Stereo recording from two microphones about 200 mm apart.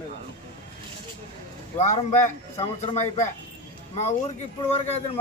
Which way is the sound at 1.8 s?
35° left (ahead or behind).